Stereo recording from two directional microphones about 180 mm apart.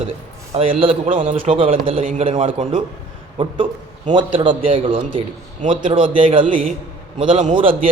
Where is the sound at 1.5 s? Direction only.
30° right (ahead or behind).